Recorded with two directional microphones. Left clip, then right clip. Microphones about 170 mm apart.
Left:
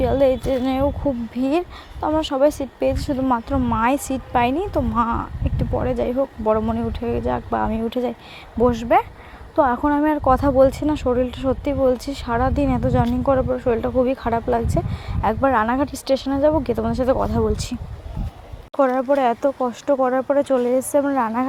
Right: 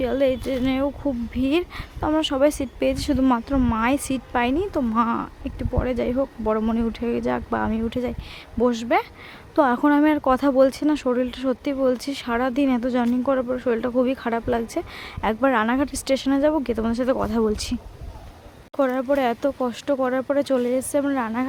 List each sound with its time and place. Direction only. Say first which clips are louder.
0.0 s speech: left 4 dB; 5° right (ahead or behind)
4.7 s speech: left 2 dB; 20° right (ahead or behind)
9.6 s speech: left 1 dB; 25° right (ahead or behind)
18.8 s speech: left 4 dB; 5° right (ahead or behind)